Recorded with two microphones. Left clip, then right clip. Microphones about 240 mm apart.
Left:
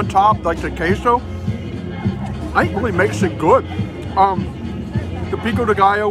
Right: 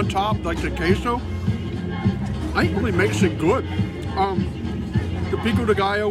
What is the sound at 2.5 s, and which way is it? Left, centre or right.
A man's voice, centre.